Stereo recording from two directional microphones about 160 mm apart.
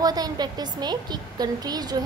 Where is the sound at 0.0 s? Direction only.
25° right (ahead or behind).